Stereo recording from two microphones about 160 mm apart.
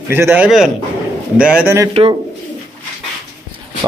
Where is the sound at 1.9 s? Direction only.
35° right (ahead or behind).